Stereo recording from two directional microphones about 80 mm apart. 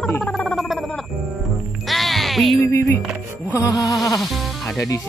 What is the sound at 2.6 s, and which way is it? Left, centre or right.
Speech, left.